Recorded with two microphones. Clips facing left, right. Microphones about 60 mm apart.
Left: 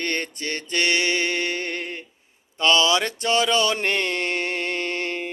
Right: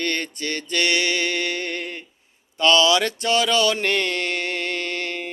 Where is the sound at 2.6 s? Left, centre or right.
Left.